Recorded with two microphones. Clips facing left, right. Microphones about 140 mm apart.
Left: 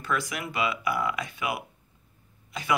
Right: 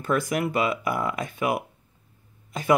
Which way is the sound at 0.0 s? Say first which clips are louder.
Right 6 dB; 45° right (ahead or behind).